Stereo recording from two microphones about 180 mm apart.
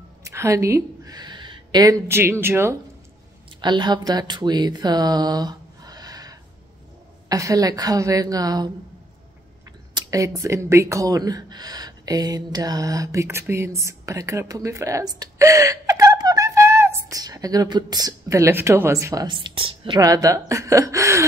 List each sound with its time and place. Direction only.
0.2 s speech: 15° right (ahead or behind)
3.6 s a woman's voice: 25° right (ahead or behind)
9.9 s speech: 20° right (ahead or behind)
20.0 s a woman's voice: 20° right (ahead or behind)